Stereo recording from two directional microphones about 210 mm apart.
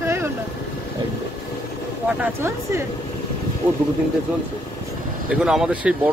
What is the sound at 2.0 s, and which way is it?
Speech, 10° right (ahead or behind).